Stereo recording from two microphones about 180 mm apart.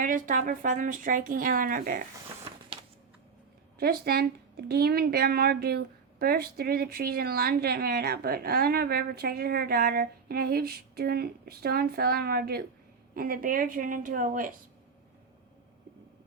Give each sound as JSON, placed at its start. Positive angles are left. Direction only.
{"t": 0.0, "sound": "speech", "side_deg": -45}
{"t": 3.8, "sound": "speech", "side_deg": -60}